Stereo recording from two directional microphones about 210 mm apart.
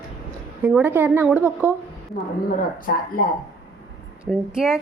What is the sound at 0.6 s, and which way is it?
A woman's voice, 10° right (ahead or behind).